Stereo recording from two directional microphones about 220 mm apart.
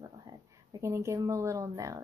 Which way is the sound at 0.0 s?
15° right (ahead or behind).